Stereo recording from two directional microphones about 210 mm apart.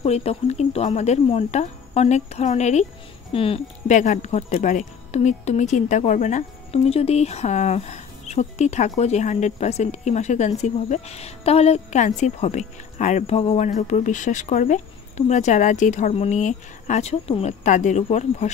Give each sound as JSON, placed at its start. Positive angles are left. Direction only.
{"t": 0.0, "sound": "speech", "side_deg": 30}